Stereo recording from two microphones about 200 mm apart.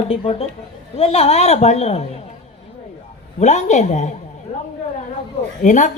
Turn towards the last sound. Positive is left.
turn(degrees=40)  # may be behind; listen again after turning